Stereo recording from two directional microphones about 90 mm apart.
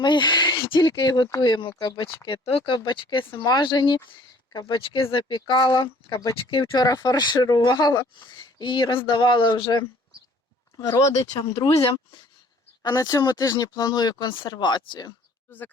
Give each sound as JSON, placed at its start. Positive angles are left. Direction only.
{"t": 0.0, "sound": "speech", "side_deg": 55}
{"t": 2.5, "sound": "speech", "side_deg": 80}
{"t": 4.5, "sound": "speech", "side_deg": 75}
{"t": 5.5, "sound": "speech", "side_deg": 45}
{"t": 6.3, "sound": "speech", "side_deg": 80}
{"t": 6.8, "sound": "speech", "side_deg": 50}
{"t": 10.8, "sound": "speech", "side_deg": 35}
{"t": 12.8, "sound": "speech", "side_deg": 45}
{"t": 15.4, "sound": "speech", "side_deg": 20}